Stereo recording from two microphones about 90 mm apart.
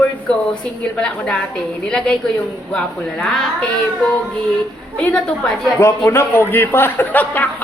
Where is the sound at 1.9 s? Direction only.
10° left (ahead or behind).